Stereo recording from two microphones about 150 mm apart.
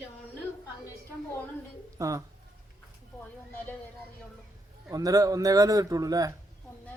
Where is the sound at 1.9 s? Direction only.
20° right (ahead or behind).